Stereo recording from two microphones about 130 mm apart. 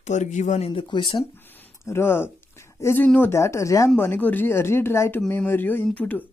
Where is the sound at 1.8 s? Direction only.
20° left (ahead or behind).